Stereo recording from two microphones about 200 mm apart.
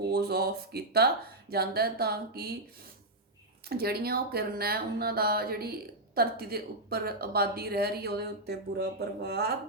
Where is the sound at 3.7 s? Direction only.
50° right (ahead or behind).